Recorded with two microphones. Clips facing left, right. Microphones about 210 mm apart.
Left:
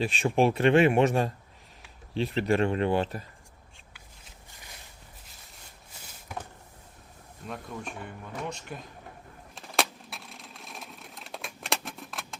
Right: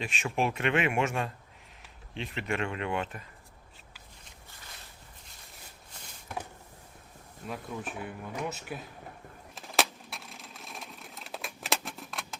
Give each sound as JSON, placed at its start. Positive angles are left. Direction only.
{"t": 0.0, "sound": "speech", "side_deg": 35}
{"t": 7.4, "sound": "speech", "side_deg": -5}
{"t": 9.6, "sound": "a sound", "side_deg": 0}